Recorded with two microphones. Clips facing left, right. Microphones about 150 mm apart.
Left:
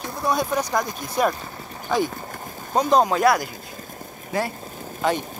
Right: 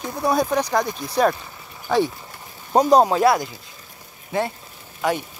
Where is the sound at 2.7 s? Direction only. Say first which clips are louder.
Right 3 dB; 40° right (ahead or behind).